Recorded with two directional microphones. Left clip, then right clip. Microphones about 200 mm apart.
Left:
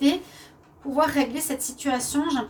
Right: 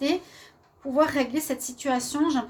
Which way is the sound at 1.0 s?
45° right (ahead or behind).